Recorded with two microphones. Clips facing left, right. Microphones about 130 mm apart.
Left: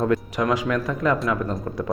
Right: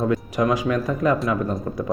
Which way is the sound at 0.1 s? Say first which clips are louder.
Right 1 dB; 20° right (ahead or behind).